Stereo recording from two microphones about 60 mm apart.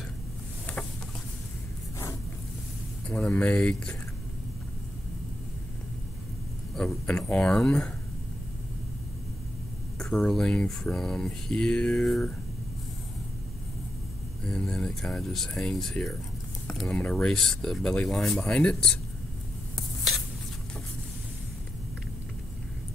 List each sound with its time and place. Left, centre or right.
3.2 s speech: left
6.7 s a sound: centre
7.1 s speech: centre
10.1 s speech: centre
14.4 s speech: centre